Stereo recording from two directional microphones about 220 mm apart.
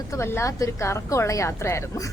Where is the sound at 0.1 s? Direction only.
10° left (ahead or behind).